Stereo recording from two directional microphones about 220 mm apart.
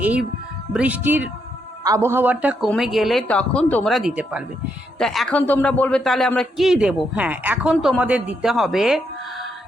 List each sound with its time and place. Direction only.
0.0 s a man's voice: 5° right (ahead or behind)